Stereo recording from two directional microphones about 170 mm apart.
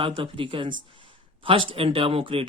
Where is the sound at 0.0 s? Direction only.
30° right (ahead or behind).